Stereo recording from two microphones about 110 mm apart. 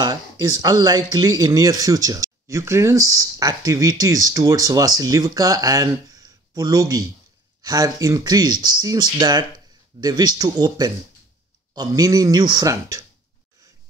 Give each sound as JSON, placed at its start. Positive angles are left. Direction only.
{"t": 0.0, "sound": "speech", "side_deg": -35}